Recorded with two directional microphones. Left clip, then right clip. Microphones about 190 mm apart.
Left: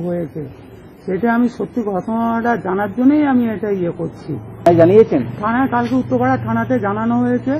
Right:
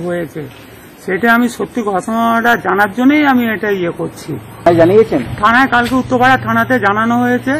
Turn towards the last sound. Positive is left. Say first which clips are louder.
# right 4 dB
turn(degrees=-40)  # may be behind; listen again after turning